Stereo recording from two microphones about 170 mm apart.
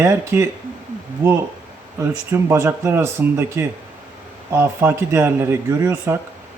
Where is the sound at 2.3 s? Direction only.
15° right (ahead or behind).